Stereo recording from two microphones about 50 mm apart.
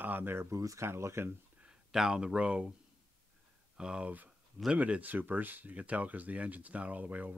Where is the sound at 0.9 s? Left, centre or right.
Right.